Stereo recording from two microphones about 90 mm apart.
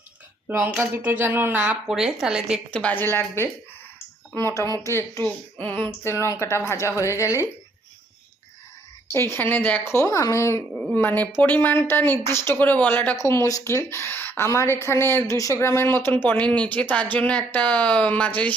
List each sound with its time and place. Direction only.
0.4 s speech: 25° right (ahead or behind)
1.9 s speech: 5° right (ahead or behind)
2.7 s a woman's voice: 20° left (ahead or behind)
5.2 s speech: 15° left (ahead or behind)
6.1 s speech: 35° left (ahead or behind)
9.1 s a woman's voice: 25° left (ahead or behind)
10.9 s a woman's voice: 20° left (ahead or behind)
13.1 s a woman's voice: 35° left (ahead or behind); by 18.5 s 15° left (ahead or behind)